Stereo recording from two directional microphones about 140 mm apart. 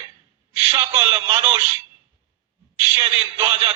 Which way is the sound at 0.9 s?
30° right (ahead or behind).